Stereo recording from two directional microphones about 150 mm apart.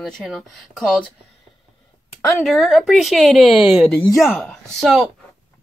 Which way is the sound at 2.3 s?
Centre (ahead or behind).